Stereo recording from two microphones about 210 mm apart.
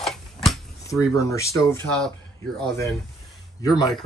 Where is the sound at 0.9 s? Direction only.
15° left (ahead or behind).